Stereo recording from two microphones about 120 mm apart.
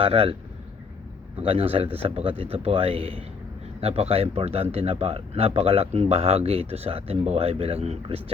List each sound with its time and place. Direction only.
0.0 s speech: 50° right (ahead or behind)
1.4 s speech: 55° right (ahead or behind)